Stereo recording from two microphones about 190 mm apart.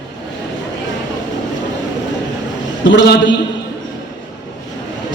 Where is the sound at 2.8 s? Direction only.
70° left (ahead or behind).